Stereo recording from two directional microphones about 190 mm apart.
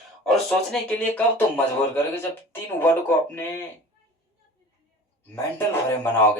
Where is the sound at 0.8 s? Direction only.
5° left (ahead or behind).